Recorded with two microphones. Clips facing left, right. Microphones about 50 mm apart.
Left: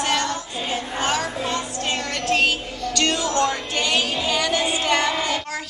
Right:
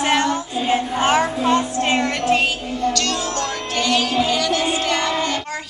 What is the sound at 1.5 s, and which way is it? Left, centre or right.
Music, right.